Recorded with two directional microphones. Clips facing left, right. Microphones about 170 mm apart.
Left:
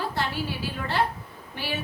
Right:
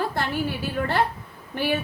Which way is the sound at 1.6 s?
50° right (ahead or behind).